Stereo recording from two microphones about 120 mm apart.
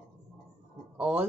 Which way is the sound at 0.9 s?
15° right (ahead or behind).